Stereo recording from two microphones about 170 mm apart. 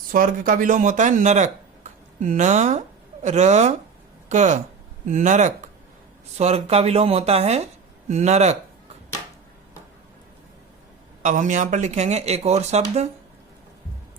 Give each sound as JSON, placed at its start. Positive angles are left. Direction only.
{"t": 0.1, "sound": "speech", "side_deg": -55}
{"t": 11.2, "sound": "speech", "side_deg": -50}